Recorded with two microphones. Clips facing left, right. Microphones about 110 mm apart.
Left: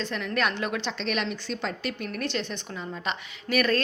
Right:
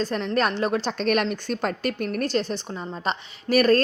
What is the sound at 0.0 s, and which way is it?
A woman's voice, 40° right (ahead or behind).